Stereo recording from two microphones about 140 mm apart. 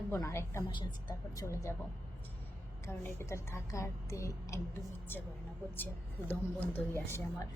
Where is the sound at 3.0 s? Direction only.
20° left (ahead or behind).